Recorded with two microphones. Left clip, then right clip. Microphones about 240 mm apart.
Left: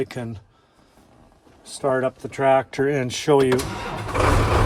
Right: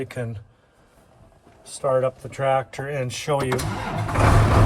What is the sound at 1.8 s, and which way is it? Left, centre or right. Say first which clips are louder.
Speech: right 1 dB; left.